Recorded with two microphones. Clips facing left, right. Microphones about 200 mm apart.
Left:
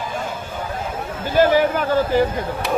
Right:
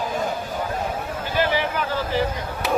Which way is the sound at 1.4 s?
45° left (ahead or behind).